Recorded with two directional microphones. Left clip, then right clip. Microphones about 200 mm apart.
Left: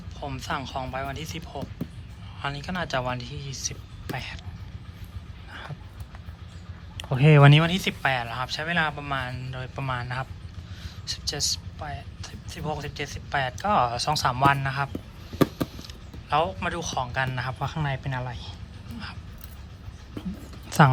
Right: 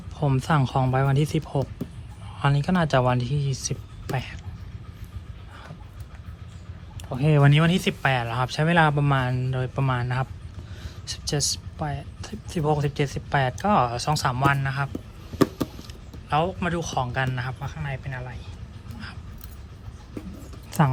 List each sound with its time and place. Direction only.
0.3 s speech: 15° right (ahead or behind)
7.2 s speech: 40° right (ahead or behind)
7.5 s speech: centre (ahead or behind)
17.6 s speech: 15° left (ahead or behind)